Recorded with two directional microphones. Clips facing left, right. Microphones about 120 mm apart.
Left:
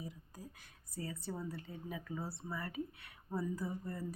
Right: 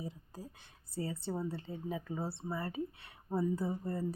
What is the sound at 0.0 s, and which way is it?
A woman's voice, 30° right (ahead or behind).